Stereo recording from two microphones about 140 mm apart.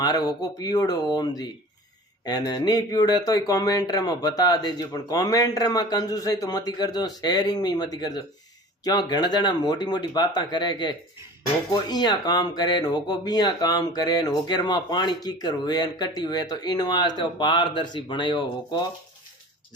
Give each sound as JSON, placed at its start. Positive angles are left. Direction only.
{"t": 0.0, "sound": "speech", "side_deg": 30}